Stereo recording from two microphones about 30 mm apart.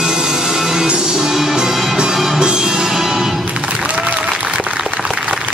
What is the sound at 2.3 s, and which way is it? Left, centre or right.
Music, right.